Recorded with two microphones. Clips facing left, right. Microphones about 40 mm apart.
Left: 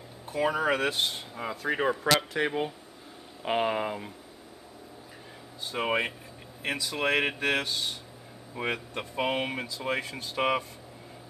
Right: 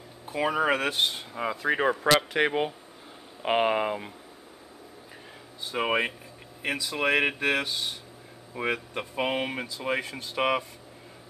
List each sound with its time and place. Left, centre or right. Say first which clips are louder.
0.3 s speech: right 1 dB; centre
5.7 s speech: right 2 dB; centre